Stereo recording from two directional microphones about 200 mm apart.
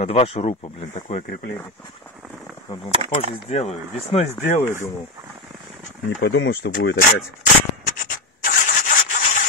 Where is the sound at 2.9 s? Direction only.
35° right (ahead or behind).